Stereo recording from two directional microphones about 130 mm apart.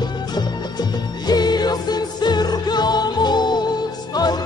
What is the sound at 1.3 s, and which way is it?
Music, 30° left (ahead or behind).